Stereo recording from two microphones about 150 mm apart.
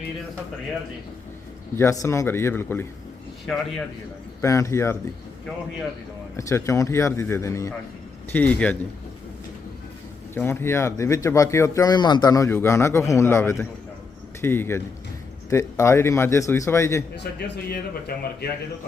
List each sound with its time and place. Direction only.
1.7 s a man's voice: 20° left (ahead or behind)
3.4 s a man's voice: centre (ahead or behind)
4.4 s speech: 20° left (ahead or behind)
6.3 s a man's voice: 20° left (ahead or behind)
10.3 s a man's voice: 15° left (ahead or behind)
17.4 s a man's voice: 90° left